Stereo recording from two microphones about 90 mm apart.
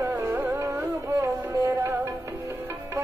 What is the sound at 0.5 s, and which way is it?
Music, 35° right (ahead or behind).